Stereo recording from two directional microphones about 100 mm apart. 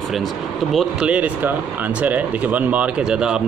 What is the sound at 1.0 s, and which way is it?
Speech, 15° right (ahead or behind).